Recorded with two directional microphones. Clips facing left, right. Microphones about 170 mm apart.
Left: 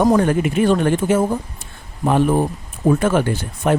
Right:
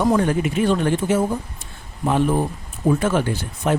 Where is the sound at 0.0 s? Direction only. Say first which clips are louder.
Left 3 dB; 50° left (ahead or behind).